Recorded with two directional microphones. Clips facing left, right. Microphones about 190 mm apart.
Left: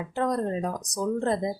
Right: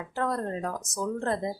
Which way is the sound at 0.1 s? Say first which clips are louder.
Left 3 dB; 20° left (ahead or behind).